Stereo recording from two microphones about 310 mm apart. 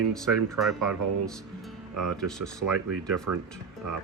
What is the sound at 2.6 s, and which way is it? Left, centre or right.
Speech, right.